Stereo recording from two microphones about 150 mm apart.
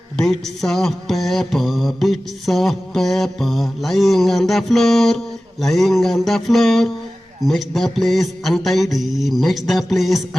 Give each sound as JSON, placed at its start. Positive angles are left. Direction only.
{"t": 0.2, "sound": "mantra", "side_deg": 0}